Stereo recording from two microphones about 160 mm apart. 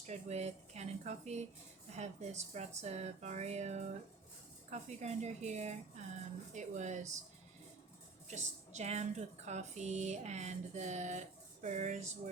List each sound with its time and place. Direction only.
0.0 s a woman's voice: 45° right (ahead or behind)
8.3 s a woman's voice: 45° right (ahead or behind)